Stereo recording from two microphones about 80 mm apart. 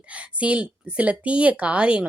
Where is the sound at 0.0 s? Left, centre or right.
Centre.